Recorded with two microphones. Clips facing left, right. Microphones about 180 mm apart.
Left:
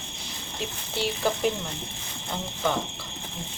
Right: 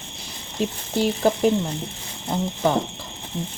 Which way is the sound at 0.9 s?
45° right (ahead or behind).